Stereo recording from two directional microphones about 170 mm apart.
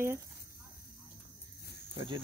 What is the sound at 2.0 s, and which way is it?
Speech, 30° right (ahead or behind).